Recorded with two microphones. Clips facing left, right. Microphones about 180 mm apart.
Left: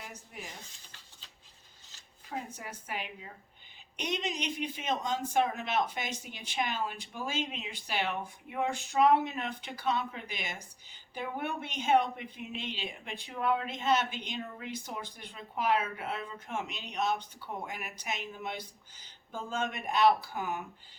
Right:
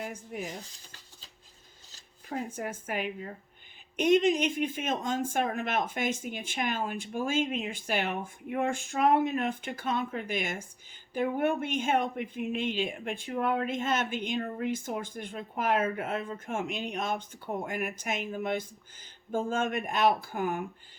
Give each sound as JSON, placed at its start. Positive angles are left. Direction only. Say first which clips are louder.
{"t": 0.0, "sound": "speech", "louder": "right 9 dB", "side_deg": -50}
{"t": 2.3, "sound": "speech", "louder": "right 6 dB", "side_deg": -50}